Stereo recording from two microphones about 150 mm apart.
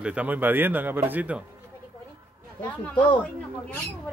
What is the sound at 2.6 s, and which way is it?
Speech, 10° left (ahead or behind).